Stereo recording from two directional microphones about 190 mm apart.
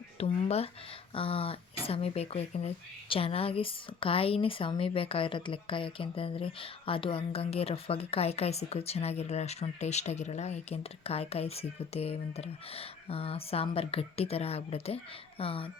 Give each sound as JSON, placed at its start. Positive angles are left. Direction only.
{"t": 0.2, "sound": "speech", "side_deg": 30}